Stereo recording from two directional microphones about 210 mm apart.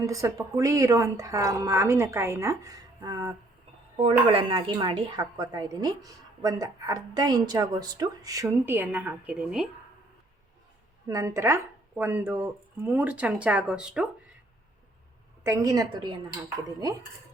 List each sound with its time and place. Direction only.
0.0 s a woman's voice: 15° right (ahead or behind)
11.1 s a woman's voice: 15° right (ahead or behind)
15.4 s a woman's voice: 15° right (ahead or behind)